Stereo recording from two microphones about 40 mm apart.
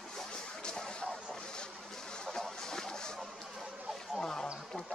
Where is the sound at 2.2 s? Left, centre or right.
Centre.